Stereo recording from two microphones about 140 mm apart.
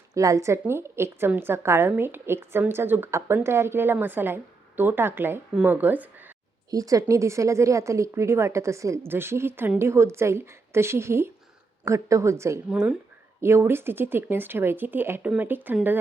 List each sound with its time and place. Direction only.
0.1 s a woman's voice: 25° right (ahead or behind)
6.7 s a woman's voice: 25° right (ahead or behind)
12.7 s a woman's voice: 5° right (ahead or behind)
13.4 s a woman's voice: 20° right (ahead or behind)